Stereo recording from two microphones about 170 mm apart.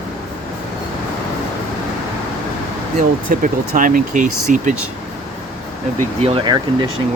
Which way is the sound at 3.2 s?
50° right (ahead or behind).